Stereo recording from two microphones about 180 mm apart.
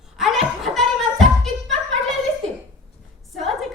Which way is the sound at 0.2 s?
Centre (ahead or behind).